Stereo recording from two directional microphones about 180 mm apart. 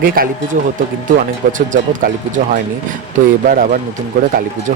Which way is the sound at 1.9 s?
45° right (ahead or behind).